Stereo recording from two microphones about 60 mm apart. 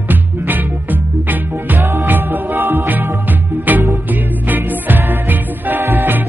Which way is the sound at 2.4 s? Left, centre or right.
Right.